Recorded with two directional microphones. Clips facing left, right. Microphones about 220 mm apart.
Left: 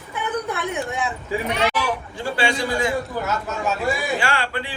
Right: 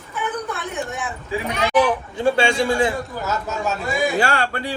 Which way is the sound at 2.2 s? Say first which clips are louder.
Right 6 dB; 25° right (ahead or behind).